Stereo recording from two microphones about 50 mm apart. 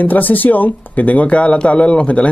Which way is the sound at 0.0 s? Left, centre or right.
Left.